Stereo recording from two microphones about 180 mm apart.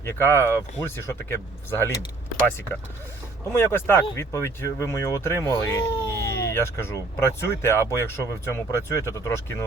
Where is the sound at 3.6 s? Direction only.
10° left (ahead or behind).